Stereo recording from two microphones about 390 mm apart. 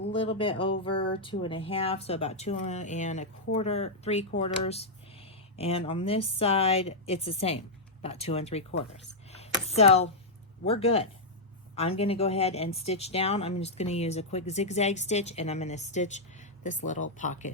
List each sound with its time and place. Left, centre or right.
0.3 s speech: centre
9.3 s a sound: centre
10.6 s speech: centre